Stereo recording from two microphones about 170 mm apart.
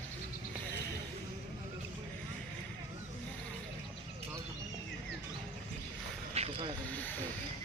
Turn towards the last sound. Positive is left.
turn(degrees=10)  # may be behind; listen again after turning